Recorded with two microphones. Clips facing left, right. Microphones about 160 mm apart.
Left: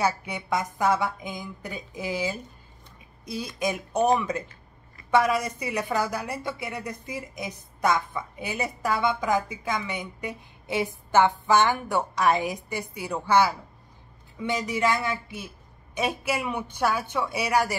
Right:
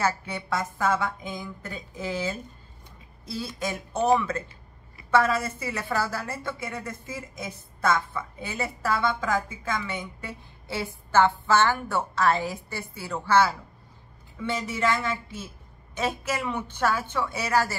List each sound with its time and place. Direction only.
0.0 s a woman's voice: 15° left (ahead or behind)